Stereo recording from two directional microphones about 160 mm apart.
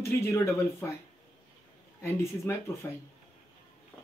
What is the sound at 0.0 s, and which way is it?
Speech, 15° left (ahead or behind).